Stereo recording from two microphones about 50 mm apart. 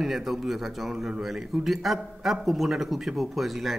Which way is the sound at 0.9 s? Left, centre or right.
Centre.